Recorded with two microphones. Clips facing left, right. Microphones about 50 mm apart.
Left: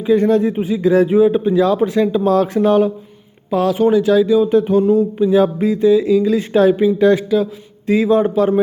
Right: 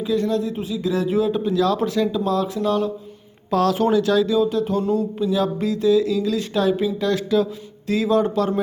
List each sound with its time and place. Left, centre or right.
0.0 s speech: left
2.2 s speech: left
3.5 s speech: centre
5.3 s speech: left
7.2 s speech: centre
7.9 s speech: left